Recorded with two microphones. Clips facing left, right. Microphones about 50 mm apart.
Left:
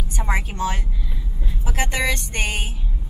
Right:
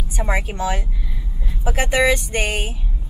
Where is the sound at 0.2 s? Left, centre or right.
Centre.